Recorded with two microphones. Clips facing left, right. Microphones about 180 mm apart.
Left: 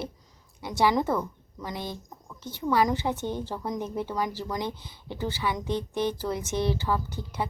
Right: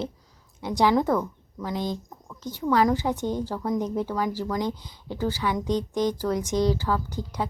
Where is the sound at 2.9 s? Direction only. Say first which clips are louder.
Right 3 dB; 15° right (ahead or behind).